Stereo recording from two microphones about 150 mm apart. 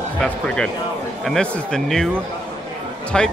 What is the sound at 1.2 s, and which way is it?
Speech, 5° left (ahead or behind).